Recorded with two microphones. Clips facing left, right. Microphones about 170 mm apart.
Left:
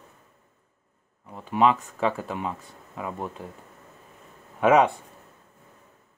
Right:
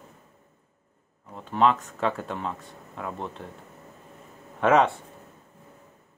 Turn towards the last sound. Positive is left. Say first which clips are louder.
# left 2 dB
turn(degrees=10)  # may be behind; listen again after turning